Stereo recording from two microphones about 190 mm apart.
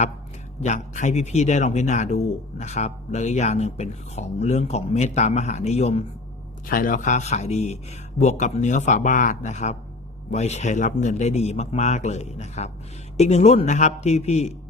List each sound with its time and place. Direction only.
0.6 s speech: 40° left (ahead or behind)
6.7 s speech: 50° left (ahead or behind)